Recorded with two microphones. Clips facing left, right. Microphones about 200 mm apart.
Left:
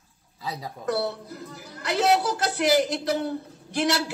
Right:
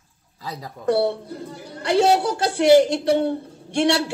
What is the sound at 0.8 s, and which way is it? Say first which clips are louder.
A woman's voice: right 7 dB; 25° right (ahead or behind).